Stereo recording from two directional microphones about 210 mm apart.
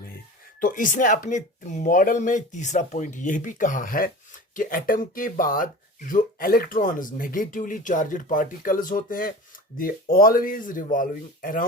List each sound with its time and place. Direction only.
0.6 s speech: 40° left (ahead or behind)